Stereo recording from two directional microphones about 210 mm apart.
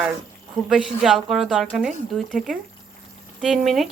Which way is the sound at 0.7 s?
Centre (ahead or behind).